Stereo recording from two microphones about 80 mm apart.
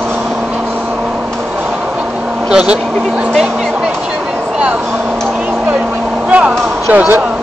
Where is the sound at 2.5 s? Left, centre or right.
Centre.